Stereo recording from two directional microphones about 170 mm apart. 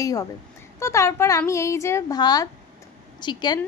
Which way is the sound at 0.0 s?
20° left (ahead or behind).